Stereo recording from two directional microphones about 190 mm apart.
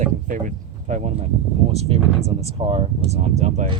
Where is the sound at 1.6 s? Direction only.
30° right (ahead or behind).